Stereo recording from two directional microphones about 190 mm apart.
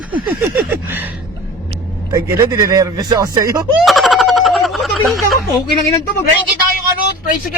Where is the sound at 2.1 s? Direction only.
20° right (ahead or behind).